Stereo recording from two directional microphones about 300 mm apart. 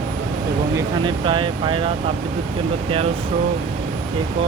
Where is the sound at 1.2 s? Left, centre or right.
Centre.